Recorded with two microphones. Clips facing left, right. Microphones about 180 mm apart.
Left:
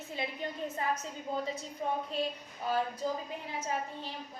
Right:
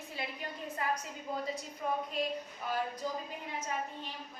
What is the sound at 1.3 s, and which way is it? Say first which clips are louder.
Speech: left 2 dB; 25° left (ahead or behind).